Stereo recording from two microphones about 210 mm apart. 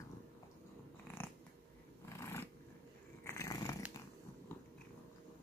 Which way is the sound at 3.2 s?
15° left (ahead or behind).